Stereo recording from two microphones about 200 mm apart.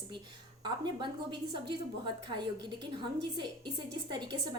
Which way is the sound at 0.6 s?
20° right (ahead or behind).